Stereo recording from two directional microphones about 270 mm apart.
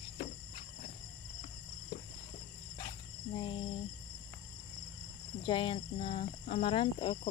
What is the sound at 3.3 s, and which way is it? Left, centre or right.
Speech, centre.